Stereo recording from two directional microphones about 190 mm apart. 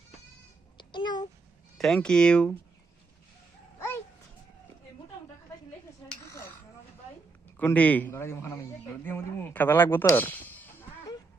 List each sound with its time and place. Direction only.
0.8 s babbling: 25° left (ahead or behind)
1.8 s speech: 5° left (ahead or behind)
6.2 s dishes: 15° left (ahead or behind)
7.5 s speech: 10° left (ahead or behind)